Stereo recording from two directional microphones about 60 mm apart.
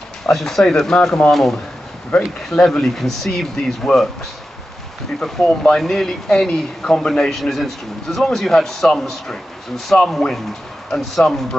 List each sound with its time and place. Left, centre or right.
0.3 s speech: centre
5.2 s speech: centre